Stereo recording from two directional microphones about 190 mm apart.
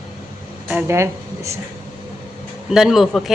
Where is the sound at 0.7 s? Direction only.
10° right (ahead or behind).